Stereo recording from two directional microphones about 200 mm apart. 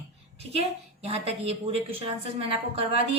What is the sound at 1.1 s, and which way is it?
A woman's voice, 30° right (ahead or behind).